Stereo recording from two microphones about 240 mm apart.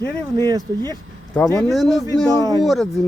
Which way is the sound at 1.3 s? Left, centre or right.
Centre.